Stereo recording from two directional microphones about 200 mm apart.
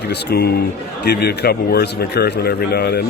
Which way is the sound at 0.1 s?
50° left (ahead or behind).